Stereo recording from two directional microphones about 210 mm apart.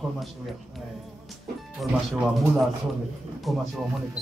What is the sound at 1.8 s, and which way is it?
Speech, centre (ahead or behind).